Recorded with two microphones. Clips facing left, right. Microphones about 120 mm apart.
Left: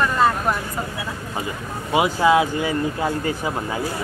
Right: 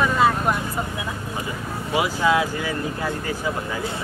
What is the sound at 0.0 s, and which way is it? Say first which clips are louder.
Vehicle: even; 5° right (ahead or behind).